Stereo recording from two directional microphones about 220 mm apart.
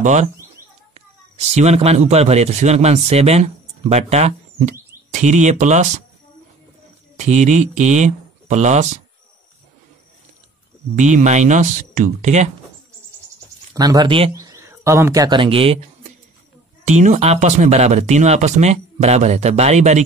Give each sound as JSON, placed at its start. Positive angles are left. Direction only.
{"t": 0.0, "sound": "speech", "side_deg": -30}
{"t": 1.5, "sound": "a man's voice", "side_deg": -30}
{"t": 7.2, "sound": "speech", "side_deg": -30}
{"t": 11.0, "sound": "speech", "side_deg": -35}
{"t": 13.7, "sound": "a man's voice", "side_deg": -15}
{"t": 16.8, "sound": "speech", "side_deg": -35}